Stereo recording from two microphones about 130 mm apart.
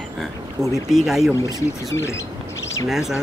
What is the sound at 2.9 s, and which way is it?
Speech, 5° right (ahead or behind).